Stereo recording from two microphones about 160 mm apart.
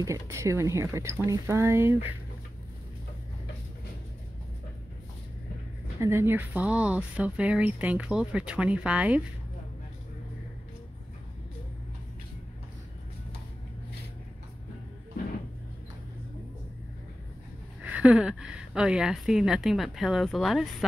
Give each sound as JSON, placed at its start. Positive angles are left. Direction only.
{"t": 0.0, "sound": "speech", "side_deg": -20}
{"t": 5.9, "sound": "speech", "side_deg": -15}
{"t": 17.8, "sound": "speech", "side_deg": -10}